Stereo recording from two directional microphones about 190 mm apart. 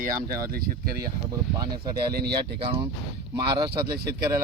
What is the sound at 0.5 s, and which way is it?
Speech, 50° right (ahead or behind).